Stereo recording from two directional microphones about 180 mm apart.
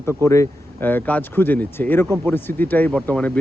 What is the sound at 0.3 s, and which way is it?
Speech, 15° left (ahead or behind).